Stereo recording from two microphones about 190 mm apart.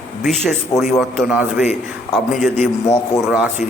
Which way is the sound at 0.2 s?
Centre (ahead or behind).